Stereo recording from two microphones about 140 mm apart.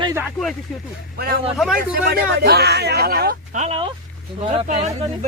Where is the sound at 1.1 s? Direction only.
90° right.